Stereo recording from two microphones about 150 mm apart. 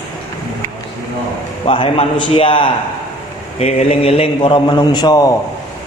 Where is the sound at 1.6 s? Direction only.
35° left (ahead or behind).